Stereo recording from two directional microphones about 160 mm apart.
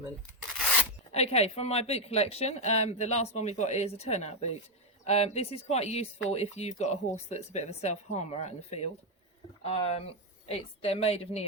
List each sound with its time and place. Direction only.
1.1 s speech: 40° left (ahead or behind)